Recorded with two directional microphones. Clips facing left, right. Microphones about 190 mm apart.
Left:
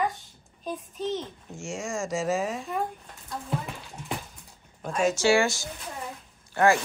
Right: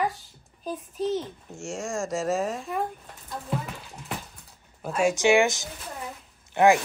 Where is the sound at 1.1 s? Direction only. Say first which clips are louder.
Right 1 dB; centre (ahead or behind).